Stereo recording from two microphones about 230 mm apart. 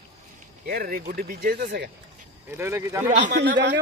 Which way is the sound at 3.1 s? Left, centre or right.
Right.